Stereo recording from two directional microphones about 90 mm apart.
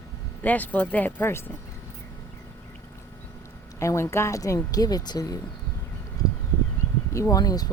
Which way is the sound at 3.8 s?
30° left (ahead or behind).